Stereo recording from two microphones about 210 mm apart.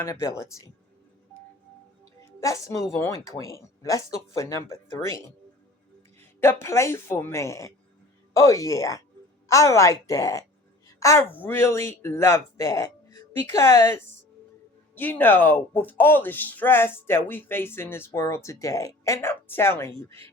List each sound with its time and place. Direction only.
0.0 s speech: 15° left (ahead or behind)
2.4 s speech: 15° left (ahead or behind)
14.9 s speech: 10° left (ahead or behind)